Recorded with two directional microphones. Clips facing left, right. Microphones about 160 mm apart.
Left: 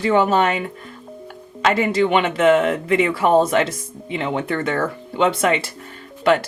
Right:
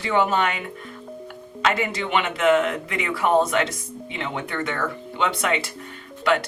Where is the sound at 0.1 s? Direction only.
35° left (ahead or behind).